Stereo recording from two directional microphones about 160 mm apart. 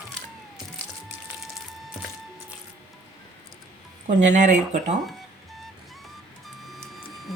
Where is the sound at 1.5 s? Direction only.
Centre (ahead or behind).